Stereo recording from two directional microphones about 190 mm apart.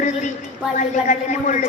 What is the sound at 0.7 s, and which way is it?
Speech, 40° left (ahead or behind).